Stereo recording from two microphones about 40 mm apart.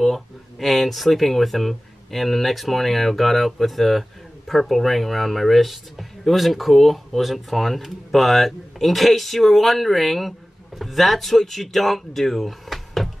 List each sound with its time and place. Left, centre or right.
0.0 s speech: centre